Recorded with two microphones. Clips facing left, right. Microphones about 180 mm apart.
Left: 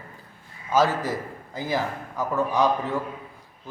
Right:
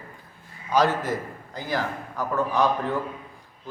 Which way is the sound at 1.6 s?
10° left (ahead or behind).